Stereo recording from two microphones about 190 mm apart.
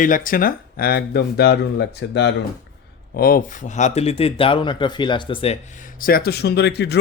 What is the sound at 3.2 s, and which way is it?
Speech, 50° left (ahead or behind).